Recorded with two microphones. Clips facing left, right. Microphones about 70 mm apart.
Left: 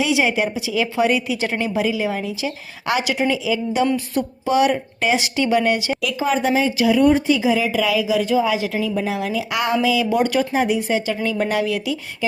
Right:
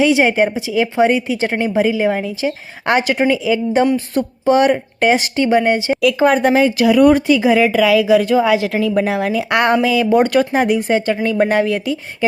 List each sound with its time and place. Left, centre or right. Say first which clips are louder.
0.0 s a woman's voice: right 6 dB; right
6.0 s speech: right 7 dB; right